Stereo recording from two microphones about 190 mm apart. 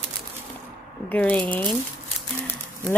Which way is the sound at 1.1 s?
5° left (ahead or behind).